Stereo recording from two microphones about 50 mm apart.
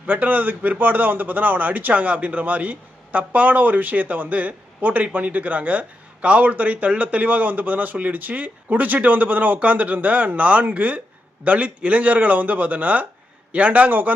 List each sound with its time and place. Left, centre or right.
0.1 s a man's voice: right